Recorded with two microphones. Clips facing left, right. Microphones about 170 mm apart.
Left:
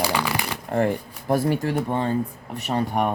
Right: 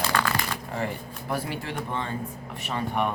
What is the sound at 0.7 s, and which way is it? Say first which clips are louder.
Speech: left 12 dB; 50° left (ahead or behind).